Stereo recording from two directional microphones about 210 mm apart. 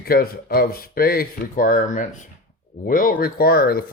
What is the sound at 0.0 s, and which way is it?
Speech, 45° left (ahead or behind).